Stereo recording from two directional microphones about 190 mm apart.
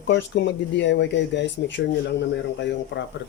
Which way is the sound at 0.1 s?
70° left (ahead or behind).